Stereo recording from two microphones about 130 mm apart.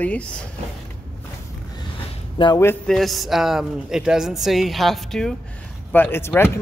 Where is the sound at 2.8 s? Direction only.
Centre (ahead or behind).